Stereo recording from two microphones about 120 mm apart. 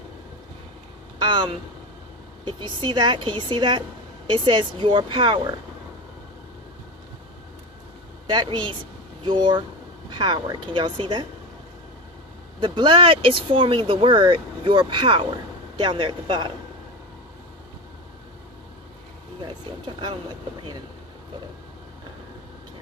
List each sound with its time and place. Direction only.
1.2 s speech: 40° right (ahead or behind)
8.3 s speech: 40° right (ahead or behind)
12.5 s speech: 45° right (ahead or behind)